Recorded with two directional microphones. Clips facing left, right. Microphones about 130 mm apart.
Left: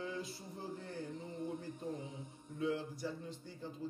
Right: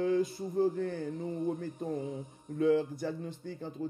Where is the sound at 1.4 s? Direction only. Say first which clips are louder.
Right 6 dB; 45° right (ahead or behind).